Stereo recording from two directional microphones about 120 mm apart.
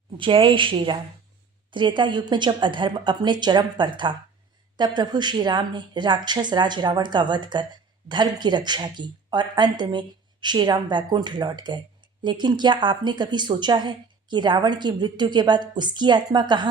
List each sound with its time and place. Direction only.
0.2 s a woman's voice: 45° right (ahead or behind)